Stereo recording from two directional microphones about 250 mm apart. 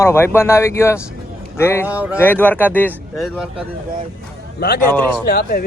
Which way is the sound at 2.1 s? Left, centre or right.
Centre.